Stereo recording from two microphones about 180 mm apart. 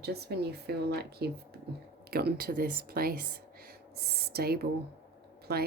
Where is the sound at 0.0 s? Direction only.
65° right (ahead or behind).